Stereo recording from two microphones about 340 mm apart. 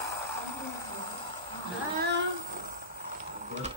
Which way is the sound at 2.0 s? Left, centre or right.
Right.